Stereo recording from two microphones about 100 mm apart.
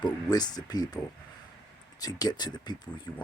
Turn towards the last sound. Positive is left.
turn(degrees=45)  # may be behind; listen again after turning